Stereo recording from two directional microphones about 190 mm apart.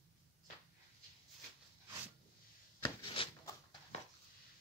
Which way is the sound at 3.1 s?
30° left (ahead or behind).